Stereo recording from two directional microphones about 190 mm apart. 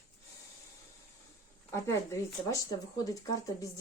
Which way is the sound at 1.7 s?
15° left (ahead or behind).